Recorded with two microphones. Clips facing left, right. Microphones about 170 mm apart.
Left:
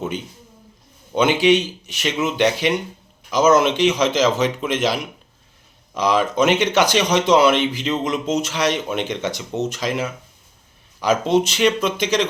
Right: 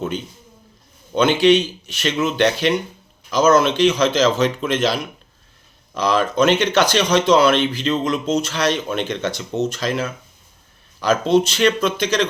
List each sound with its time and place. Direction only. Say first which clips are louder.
1.1 s speech: right 1 dB; 15° left (ahead or behind)